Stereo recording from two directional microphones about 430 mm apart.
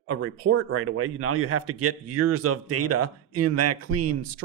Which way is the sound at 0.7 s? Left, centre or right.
Right.